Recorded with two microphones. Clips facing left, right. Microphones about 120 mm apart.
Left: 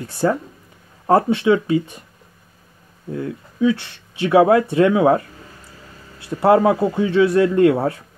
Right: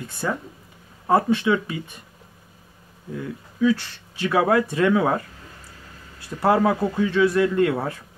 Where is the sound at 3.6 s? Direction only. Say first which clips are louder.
Left 2 dB; 20° left (ahead or behind).